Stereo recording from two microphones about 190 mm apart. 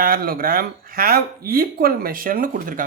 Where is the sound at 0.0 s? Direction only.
50° right (ahead or behind).